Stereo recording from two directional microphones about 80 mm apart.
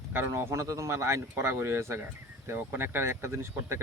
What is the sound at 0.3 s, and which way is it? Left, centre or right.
Speech, right.